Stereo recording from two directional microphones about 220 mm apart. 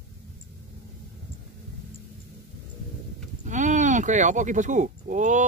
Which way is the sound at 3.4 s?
35° right (ahead or behind).